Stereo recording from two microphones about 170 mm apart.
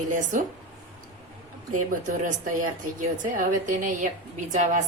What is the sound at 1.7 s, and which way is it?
Speech, 45° right (ahead or behind).